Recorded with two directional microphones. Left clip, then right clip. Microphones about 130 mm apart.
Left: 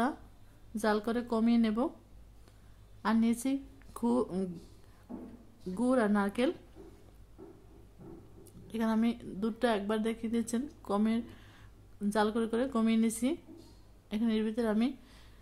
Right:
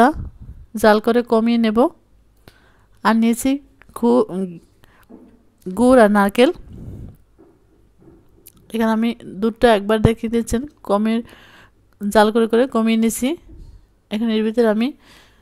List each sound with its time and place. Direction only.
0.7 s a woman's voice: 90° right
3.0 s speech: 90° right; by 4.4 s 70° right (ahead or behind)
5.8 s speech: 90° right
8.5 s a woman's voice: 90° right
10.8 s a sound: 65° right (ahead or behind)
12.1 s a woman's voice: 90° right; by 15.3 s 75° right (ahead or behind)